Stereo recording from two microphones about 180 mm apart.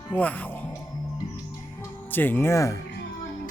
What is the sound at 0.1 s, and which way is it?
Speech, 10° left (ahead or behind).